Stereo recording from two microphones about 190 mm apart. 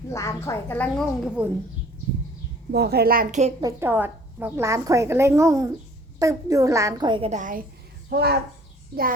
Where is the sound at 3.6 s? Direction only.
10° right (ahead or behind).